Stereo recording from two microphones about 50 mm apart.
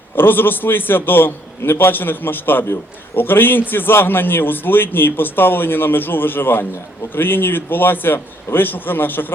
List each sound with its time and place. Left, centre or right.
0.2 s a man's voice: left